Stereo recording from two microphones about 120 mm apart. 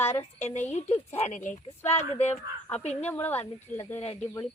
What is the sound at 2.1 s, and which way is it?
Speech, 65° left (ahead or behind).